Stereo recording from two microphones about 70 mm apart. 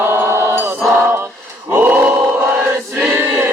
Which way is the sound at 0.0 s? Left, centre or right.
Right.